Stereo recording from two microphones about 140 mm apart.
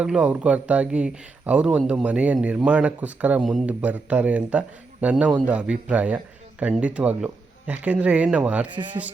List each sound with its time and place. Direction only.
0.0 s a man's voice: 10° right (ahead or behind)
8.7 s speech: 35° right (ahead or behind)